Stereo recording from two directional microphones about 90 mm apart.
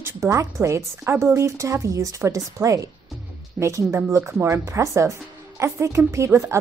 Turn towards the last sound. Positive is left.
turn(degrees=-30)  # may be behind; listen again after turning